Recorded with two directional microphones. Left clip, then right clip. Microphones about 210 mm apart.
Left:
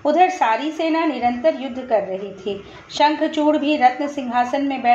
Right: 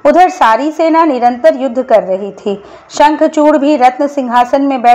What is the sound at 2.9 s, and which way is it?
A woman's voice, 35° right (ahead or behind).